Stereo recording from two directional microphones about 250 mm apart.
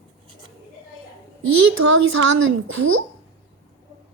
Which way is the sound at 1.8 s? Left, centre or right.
Right.